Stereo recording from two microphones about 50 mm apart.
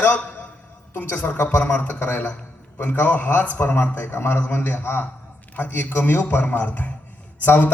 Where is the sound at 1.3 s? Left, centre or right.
Left.